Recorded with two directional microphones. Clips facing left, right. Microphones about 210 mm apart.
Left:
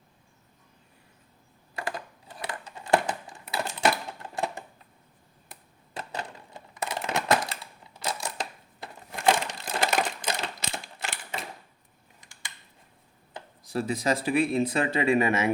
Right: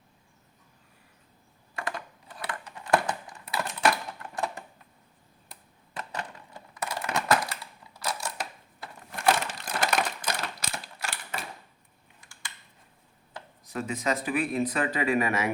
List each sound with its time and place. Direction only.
2.4 s a sound: 25° left (ahead or behind)
6.0 s crushing: 30° left (ahead or behind)
9.6 s typewriter: 25° left (ahead or behind)
13.7 s speech: 30° left (ahead or behind)